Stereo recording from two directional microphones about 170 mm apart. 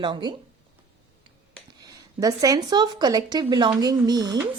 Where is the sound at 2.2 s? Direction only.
20° right (ahead or behind).